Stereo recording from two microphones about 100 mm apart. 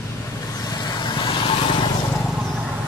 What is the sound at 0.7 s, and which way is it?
Vehicle, 45° left (ahead or behind).